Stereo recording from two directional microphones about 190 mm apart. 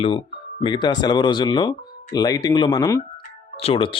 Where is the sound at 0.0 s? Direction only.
30° left (ahead or behind).